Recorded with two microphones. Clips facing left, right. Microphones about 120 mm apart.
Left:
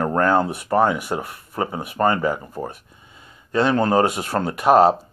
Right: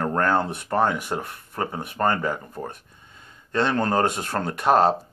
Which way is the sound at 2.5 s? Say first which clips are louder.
Left 4 dB; 5° left (ahead or behind).